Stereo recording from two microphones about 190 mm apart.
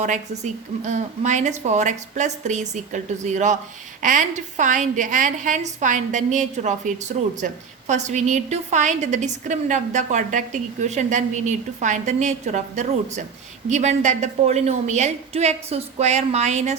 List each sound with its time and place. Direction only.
0.0 s a woman's voice: 40° right (ahead or behind)